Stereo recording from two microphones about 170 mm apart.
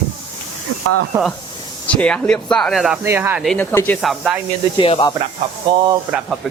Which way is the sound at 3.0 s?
15° right (ahead or behind).